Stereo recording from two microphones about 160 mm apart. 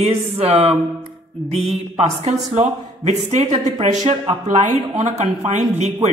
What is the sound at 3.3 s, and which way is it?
Speech, 45° right (ahead or behind).